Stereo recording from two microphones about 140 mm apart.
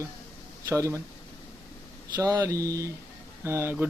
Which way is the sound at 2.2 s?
25° right (ahead or behind).